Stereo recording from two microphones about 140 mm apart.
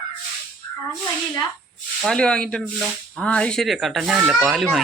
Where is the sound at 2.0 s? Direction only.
5° left (ahead or behind).